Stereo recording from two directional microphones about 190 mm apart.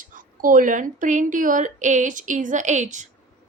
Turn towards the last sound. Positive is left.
turn(degrees=-40)  # may be behind; listen again after turning